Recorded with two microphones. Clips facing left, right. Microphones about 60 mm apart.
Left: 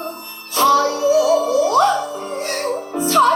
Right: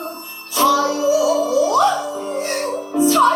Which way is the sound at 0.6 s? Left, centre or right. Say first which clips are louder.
Left 1 dB; left.